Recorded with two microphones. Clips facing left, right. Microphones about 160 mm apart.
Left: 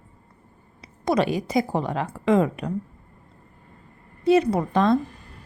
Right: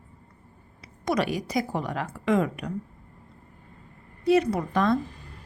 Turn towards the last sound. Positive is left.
turn(degrees=25)  # may be behind; listen again after turning